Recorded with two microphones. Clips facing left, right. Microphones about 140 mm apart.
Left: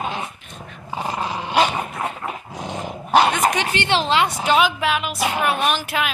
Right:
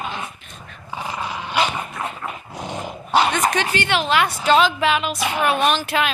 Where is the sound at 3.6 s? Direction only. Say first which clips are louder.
Even; 25° left (ahead or behind).